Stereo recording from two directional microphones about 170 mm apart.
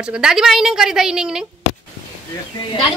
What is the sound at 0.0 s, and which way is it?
Speech, 5° right (ahead or behind).